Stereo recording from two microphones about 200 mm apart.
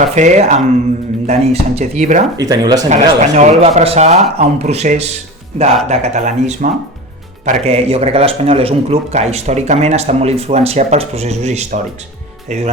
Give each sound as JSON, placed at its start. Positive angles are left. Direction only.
{"t": 0.1, "sound": "speech", "side_deg": -35}
{"t": 2.4, "sound": "speech", "side_deg": -20}
{"t": 2.9, "sound": "speech", "side_deg": -35}